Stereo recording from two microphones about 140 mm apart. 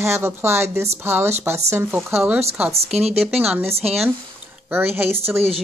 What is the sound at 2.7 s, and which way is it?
Speech, 50° right (ahead or behind).